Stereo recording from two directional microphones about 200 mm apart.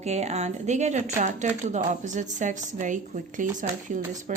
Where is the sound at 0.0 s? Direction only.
35° right (ahead or behind).